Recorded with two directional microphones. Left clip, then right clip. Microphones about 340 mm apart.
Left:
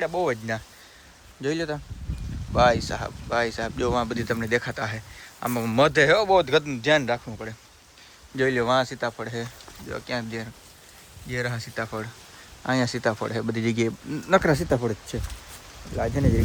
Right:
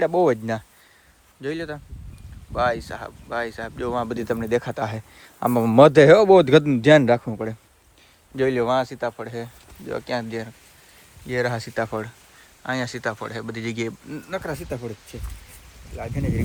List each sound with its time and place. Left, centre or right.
0.0 s speech: centre
1.4 s a man's voice: centre
8.4 s speech: centre
14.4 s speech: left